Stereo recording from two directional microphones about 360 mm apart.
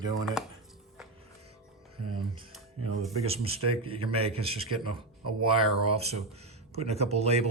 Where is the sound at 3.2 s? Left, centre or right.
Centre.